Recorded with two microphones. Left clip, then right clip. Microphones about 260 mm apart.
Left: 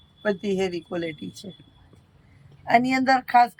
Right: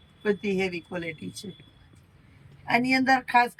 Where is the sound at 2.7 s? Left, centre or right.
Centre.